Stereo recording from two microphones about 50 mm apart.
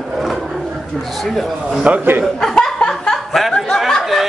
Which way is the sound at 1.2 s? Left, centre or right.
Centre.